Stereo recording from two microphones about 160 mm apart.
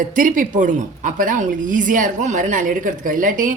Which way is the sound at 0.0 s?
55° right (ahead or behind).